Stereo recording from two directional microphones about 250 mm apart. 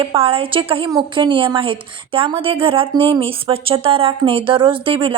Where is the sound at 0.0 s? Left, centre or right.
Right.